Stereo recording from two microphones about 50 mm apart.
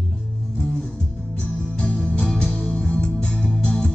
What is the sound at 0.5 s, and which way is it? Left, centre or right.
Music, centre.